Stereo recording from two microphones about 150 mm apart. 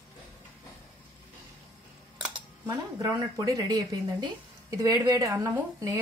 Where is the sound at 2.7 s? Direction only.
25° right (ahead or behind).